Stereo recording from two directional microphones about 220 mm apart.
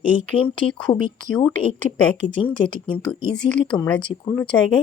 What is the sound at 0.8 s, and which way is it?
Speech, 20° left (ahead or behind).